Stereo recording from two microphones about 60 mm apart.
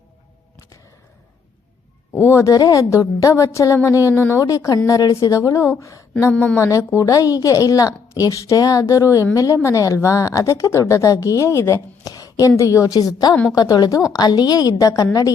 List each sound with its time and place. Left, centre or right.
2.1 s a woman's voice: left
4.4 s a woman's voice: left
6.3 s speech: left
6.6 s a woman's voice: left
12.0 s a sound: left
12.5 s a woman's voice: left
13.5 s a woman's voice: left
14.1 s a woman's voice: left